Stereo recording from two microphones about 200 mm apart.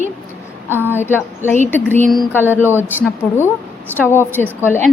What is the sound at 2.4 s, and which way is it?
Speech, 10° right (ahead or behind).